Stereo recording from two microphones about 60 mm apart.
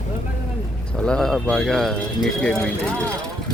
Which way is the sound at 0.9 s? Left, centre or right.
Centre.